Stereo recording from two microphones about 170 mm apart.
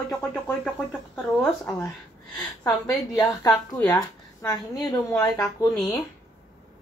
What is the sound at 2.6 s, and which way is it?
Speech, 20° left (ahead or behind).